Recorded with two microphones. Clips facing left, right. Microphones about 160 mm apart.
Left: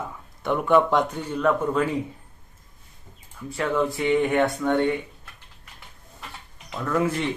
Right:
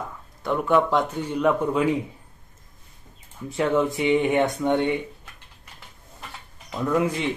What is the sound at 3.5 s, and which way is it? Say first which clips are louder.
Speech: right 2 dB; 20° right (ahead or behind).